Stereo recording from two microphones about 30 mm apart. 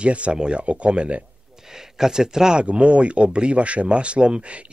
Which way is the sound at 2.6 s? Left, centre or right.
Right.